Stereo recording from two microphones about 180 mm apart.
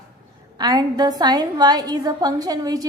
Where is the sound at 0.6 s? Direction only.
25° right (ahead or behind).